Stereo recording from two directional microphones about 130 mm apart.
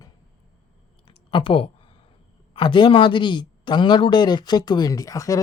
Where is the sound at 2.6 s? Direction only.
40° left (ahead or behind).